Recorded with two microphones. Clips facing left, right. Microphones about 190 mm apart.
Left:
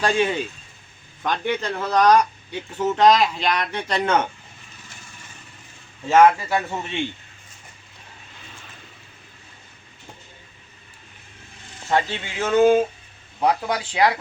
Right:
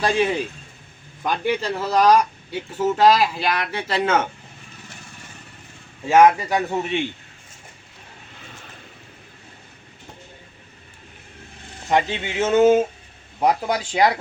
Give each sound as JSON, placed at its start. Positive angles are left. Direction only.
{"t": 0.0, "sound": "a man's voice", "side_deg": -5}
{"t": 6.1, "sound": "speech", "side_deg": -15}
{"t": 11.9, "sound": "speech", "side_deg": -15}
{"t": 13.9, "sound": "speech", "side_deg": -20}